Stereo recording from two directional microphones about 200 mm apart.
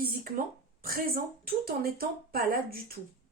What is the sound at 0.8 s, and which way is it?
Speech, 50° right (ahead or behind).